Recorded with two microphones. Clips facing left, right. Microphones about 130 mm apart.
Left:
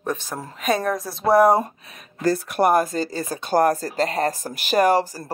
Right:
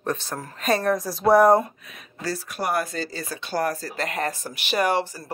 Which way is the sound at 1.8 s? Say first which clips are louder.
Left 9 dB; 45° left (ahead or behind).